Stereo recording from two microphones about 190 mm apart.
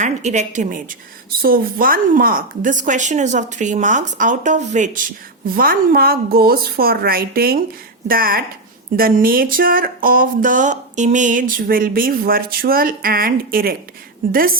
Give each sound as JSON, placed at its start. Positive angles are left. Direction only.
{"t": 0.0, "sound": "a woman's voice", "side_deg": -40}
{"t": 5.5, "sound": "speech", "side_deg": -50}